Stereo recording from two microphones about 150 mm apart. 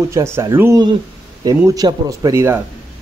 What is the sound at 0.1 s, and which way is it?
Speech, 20° right (ahead or behind).